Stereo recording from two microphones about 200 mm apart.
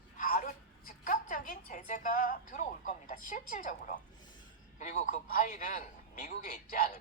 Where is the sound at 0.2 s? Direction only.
45° left (ahead or behind).